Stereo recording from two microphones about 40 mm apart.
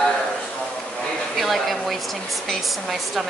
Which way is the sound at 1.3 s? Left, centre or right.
Centre.